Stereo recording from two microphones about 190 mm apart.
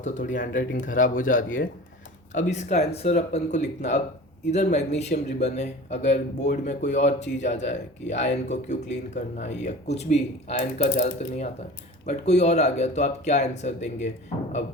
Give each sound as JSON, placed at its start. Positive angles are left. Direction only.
{"t": 0.0, "sound": "speech", "side_deg": 40}